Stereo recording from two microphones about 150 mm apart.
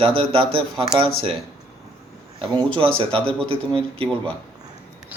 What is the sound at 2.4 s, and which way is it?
Speech, 35° right (ahead or behind).